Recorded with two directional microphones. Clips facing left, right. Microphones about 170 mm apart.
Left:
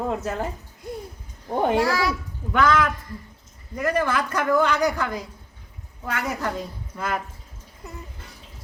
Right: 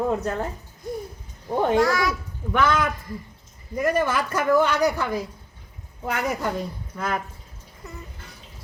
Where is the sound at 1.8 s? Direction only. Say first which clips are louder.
Even; 30° left (ahead or behind).